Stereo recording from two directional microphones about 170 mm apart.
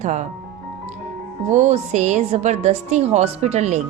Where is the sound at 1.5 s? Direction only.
40° right (ahead or behind).